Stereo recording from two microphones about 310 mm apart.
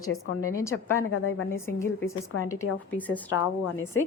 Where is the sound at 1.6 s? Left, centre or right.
Centre.